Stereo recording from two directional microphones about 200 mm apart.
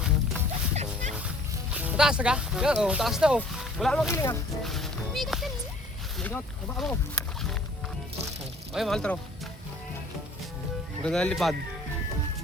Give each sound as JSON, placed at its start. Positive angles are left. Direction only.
{"t": 0.7, "sound": "music", "side_deg": -35}
{"t": 1.7, "sound": "speech", "side_deg": -5}
{"t": 4.1, "sound": "speech", "side_deg": 15}
{"t": 4.6, "sound": "music", "side_deg": 0}
{"t": 6.1, "sound": "speech", "side_deg": 5}
{"t": 8.7, "sound": "speech", "side_deg": 0}
{"t": 11.0, "sound": "speech", "side_deg": 5}